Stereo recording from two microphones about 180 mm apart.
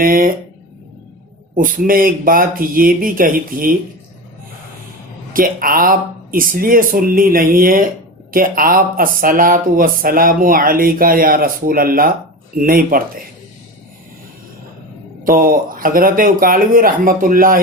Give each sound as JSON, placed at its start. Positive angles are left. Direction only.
{"t": 0.0, "sound": "speech", "side_deg": -50}
{"t": 1.5, "sound": "speech", "side_deg": -50}
{"t": 5.3, "sound": "speech", "side_deg": -50}
{"t": 15.2, "sound": "speech", "side_deg": -50}